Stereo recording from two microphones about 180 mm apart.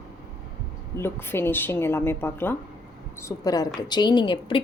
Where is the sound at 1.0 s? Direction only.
15° left (ahead or behind).